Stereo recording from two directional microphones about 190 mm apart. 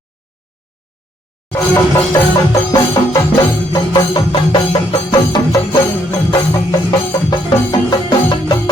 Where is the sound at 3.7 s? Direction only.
25° left (ahead or behind).